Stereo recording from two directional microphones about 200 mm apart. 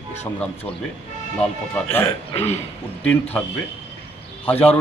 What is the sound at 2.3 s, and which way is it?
Speech, 30° left (ahead or behind).